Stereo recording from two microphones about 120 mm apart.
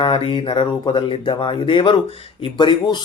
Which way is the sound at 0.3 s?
45° left (ahead or behind).